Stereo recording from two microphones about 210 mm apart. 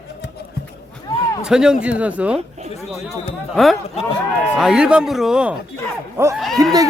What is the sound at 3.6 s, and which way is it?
A man's voice, centre (ahead or behind).